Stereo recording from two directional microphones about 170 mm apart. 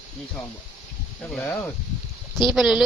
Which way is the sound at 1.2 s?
5° left (ahead or behind).